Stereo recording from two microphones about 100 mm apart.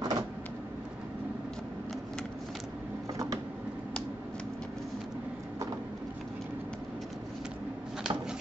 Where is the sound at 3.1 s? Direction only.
35° right (ahead or behind).